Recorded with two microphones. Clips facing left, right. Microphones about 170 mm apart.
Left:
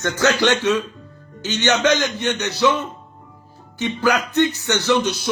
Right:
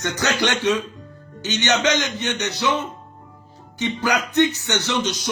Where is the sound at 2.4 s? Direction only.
20° right (ahead or behind).